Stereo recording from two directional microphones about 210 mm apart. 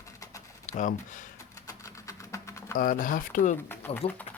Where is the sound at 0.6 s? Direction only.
35° left (ahead or behind).